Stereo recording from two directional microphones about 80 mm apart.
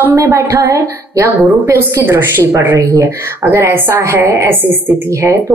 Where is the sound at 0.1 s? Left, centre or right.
Right.